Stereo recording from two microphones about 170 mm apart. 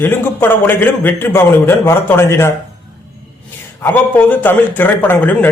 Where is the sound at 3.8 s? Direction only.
10° left (ahead or behind).